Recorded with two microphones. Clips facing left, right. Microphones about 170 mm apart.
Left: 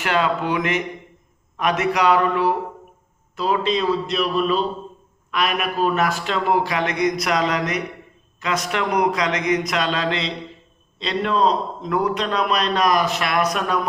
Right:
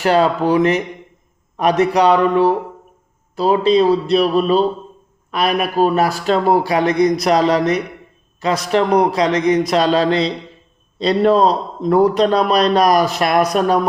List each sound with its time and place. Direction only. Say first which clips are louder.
0.0 s a man's voice: right 7 dB; 35° right (ahead or behind)